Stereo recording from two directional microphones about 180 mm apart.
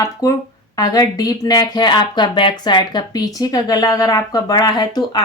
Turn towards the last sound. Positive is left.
turn(degrees=25)  # may be behind; listen again after turning